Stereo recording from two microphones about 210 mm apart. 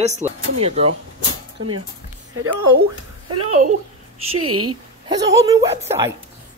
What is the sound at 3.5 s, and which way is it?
Speech, 35° right (ahead or behind).